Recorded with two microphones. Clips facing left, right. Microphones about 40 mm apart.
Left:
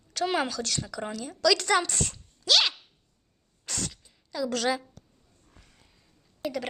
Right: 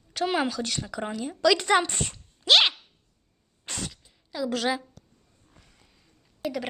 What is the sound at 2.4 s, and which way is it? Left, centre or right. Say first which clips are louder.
Dog: right 4 dB; right.